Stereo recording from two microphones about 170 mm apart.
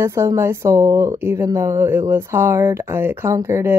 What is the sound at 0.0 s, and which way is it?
Speech, 15° right (ahead or behind).